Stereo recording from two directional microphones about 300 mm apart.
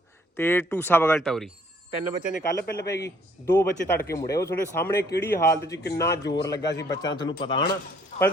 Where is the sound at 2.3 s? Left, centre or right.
Left.